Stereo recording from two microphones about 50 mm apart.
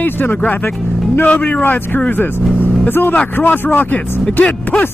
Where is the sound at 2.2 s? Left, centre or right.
Left.